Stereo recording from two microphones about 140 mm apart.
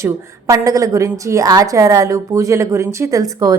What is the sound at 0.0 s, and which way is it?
A woman's voice, 20° right (ahead or behind).